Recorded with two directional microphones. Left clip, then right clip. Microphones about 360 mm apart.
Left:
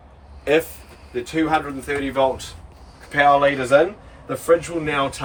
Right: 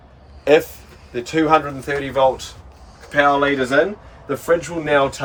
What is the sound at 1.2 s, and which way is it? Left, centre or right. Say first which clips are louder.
Speech: right 5 dB; centre.